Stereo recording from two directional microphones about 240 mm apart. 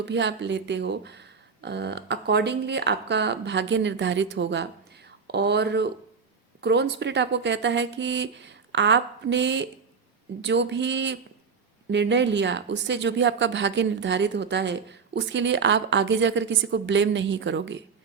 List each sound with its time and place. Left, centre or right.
0.0 s speech: right